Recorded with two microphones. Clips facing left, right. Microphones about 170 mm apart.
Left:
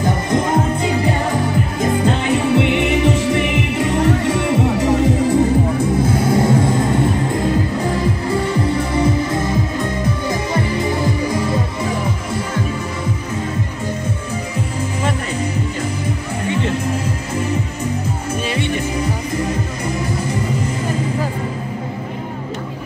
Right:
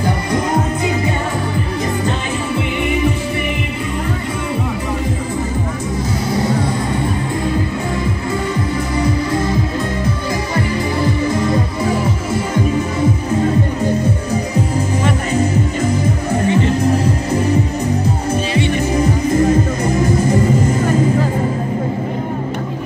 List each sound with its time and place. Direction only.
2.3 s music: 75° left (ahead or behind)
6.1 s music: 50° left (ahead or behind)